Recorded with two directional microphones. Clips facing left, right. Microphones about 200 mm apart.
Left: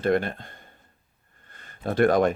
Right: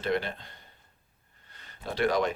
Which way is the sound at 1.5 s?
50° left (ahead or behind).